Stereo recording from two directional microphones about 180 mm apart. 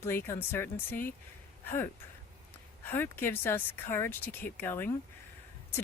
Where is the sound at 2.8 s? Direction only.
10° left (ahead or behind).